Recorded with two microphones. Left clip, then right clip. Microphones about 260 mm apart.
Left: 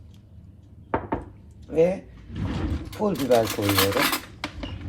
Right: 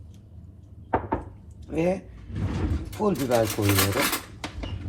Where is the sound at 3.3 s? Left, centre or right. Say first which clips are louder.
Left 5 dB; left.